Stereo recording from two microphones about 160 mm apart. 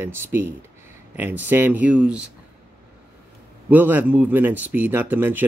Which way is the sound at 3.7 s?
10° right (ahead or behind).